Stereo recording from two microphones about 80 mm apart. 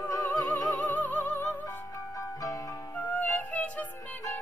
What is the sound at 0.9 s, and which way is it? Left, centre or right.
Music, left.